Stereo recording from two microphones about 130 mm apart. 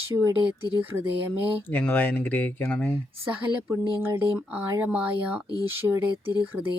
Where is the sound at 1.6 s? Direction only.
15° left (ahead or behind).